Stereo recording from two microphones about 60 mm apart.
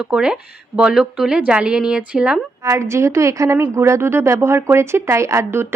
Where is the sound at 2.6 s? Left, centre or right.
Right.